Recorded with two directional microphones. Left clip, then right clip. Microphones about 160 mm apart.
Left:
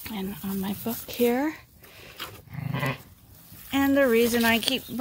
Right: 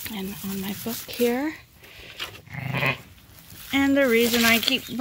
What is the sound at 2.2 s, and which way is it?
Livestock, 85° left.